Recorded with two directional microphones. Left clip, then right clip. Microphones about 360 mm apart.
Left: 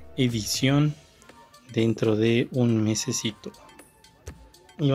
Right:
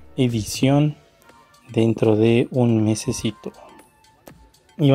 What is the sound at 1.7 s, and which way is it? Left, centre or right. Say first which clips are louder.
Speech: right 6 dB; centre.